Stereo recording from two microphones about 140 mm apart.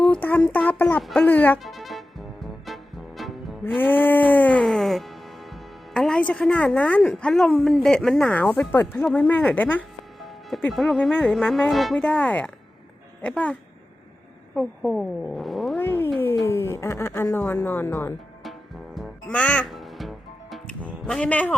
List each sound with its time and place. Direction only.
0.0 s speech: 10° left (ahead or behind)
1.0 s music: 5° left (ahead or behind)
1.5 s music: centre (ahead or behind)
3.6 s music: 15° left (ahead or behind)
9.0 s speech: centre (ahead or behind)
9.3 s music: 10° left (ahead or behind)
10.2 s music: centre (ahead or behind)
10.7 s speech: centre (ahead or behind)
11.7 s music: centre (ahead or behind)
14.5 s speech: centre (ahead or behind)
15.8 s a sound: 15° left (ahead or behind)
18.9 s music: 5° left (ahead or behind)